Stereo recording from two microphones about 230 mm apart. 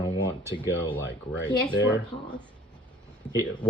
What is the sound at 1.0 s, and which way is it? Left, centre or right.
Speech, left.